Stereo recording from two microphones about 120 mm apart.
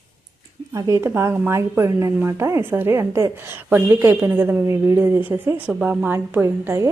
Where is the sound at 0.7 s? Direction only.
25° right (ahead or behind).